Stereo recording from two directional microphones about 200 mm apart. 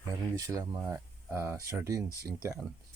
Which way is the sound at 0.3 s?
15° right (ahead or behind).